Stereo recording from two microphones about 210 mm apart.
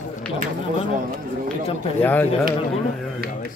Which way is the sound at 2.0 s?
10° left (ahead or behind).